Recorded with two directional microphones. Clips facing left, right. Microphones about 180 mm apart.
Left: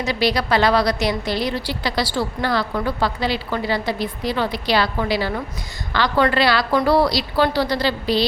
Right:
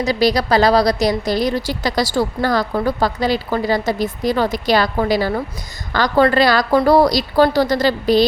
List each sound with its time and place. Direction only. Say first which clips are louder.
0.0 s a woman's voice: right 4 dB; 40° right (ahead or behind)